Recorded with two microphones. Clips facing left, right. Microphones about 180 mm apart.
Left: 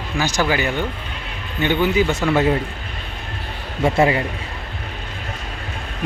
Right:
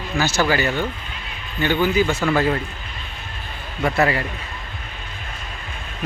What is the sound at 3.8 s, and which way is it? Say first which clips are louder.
Speech: left 3 dB; 25° left (ahead or behind).